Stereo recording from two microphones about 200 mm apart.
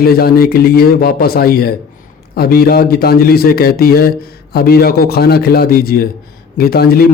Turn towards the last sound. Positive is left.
turn(degrees=50)  # may be behind; listen again after turning